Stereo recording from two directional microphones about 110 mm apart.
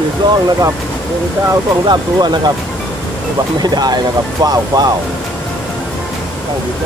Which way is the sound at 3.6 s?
40° right (ahead or behind).